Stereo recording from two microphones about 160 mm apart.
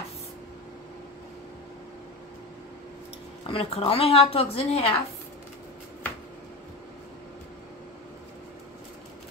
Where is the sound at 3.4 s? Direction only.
35° left (ahead or behind).